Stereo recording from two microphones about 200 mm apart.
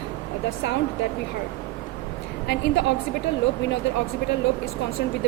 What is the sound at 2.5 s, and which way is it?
Speech, 60° left (ahead or behind).